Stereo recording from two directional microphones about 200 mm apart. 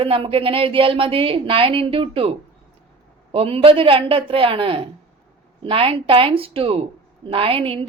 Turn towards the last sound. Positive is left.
turn(degrees=-25)  # may be behind; listen again after turning